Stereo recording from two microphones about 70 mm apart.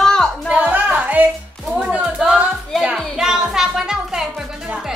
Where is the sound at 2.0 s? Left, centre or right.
Centre.